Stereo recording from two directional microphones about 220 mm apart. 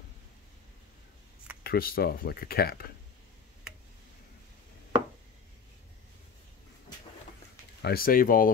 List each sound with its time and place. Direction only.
1.6 s speech: 45° left (ahead or behind)
7.8 s speech: 40° left (ahead or behind)